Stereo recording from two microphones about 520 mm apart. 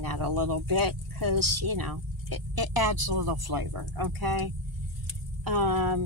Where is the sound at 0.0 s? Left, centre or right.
Right.